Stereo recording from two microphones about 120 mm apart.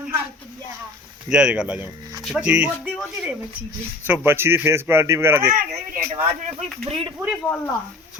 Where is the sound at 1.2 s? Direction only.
5° right (ahead or behind).